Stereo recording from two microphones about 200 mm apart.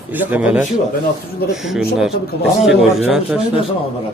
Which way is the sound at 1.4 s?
50° left (ahead or behind).